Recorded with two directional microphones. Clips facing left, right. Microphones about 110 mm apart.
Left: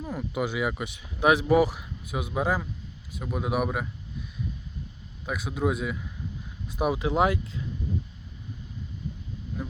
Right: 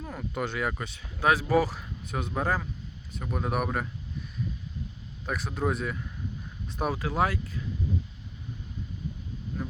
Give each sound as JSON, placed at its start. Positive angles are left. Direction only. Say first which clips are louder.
{"t": 0.0, "sound": "speech", "louder": "left 3 dB", "side_deg": 5}
{"t": 5.2, "sound": "speech", "louder": "left 2 dB", "side_deg": 5}